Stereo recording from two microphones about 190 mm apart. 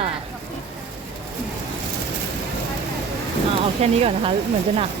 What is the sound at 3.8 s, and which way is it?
Speech, 30° right (ahead or behind).